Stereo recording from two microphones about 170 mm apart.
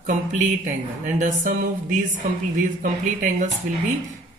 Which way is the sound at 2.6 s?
50° right (ahead or behind).